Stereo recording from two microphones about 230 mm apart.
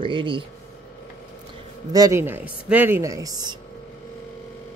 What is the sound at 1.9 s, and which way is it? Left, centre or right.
Speech, centre.